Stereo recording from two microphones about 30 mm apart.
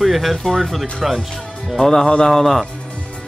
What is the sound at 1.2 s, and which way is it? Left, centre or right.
Speech, centre.